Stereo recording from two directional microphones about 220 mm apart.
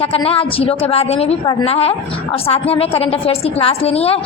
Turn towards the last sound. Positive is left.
turn(degrees=25)  # may be behind; listen again after turning